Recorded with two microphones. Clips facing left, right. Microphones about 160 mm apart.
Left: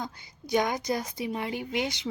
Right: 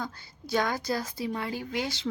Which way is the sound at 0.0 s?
15° left (ahead or behind).